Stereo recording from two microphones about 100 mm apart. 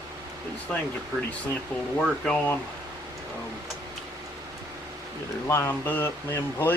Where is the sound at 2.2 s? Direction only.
10° left (ahead or behind).